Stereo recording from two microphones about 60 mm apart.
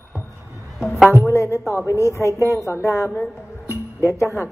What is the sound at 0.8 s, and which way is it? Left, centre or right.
Speech, centre.